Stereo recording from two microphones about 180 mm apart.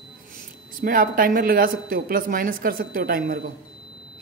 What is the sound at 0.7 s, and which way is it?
A man's voice, 50° right (ahead or behind).